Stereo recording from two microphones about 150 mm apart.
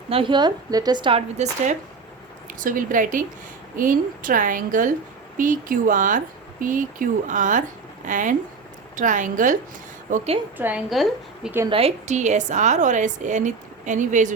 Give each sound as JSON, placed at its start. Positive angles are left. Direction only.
{"t": 0.1, "sound": "a woman's voice", "side_deg": -35}
{"t": 2.6, "sound": "speech", "side_deg": -65}
{"t": 10.6, "sound": "a woman's voice", "side_deg": -10}
{"t": 11.7, "sound": "a woman's voice", "side_deg": -40}